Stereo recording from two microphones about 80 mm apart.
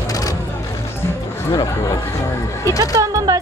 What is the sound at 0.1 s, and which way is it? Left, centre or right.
Vehicle, left.